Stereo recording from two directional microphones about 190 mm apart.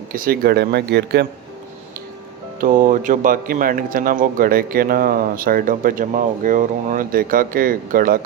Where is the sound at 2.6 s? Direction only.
45° right (ahead or behind).